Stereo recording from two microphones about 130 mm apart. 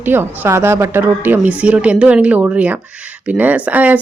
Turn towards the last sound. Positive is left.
turn(degrees=-10)  # may be behind; listen again after turning